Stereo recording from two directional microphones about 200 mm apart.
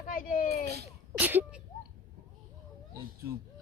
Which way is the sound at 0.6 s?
55° right (ahead or behind).